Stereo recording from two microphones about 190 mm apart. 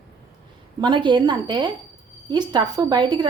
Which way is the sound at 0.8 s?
25° right (ahead or behind).